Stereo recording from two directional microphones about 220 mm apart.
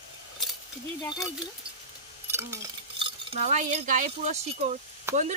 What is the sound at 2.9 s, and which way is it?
Speech, 25° right (ahead or behind).